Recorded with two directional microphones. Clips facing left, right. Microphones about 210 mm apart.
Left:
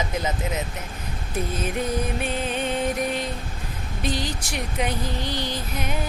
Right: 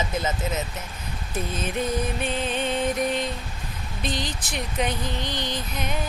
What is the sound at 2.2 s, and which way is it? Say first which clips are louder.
Speech: even; 10° left (ahead or behind).